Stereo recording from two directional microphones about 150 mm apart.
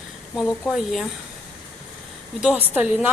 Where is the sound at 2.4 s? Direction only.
5° right (ahead or behind).